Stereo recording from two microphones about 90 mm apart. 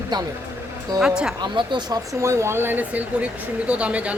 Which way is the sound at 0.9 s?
5° right (ahead or behind).